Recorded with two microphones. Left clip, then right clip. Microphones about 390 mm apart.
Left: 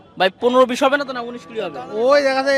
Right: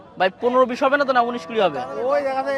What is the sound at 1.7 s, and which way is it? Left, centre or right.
Speech, left.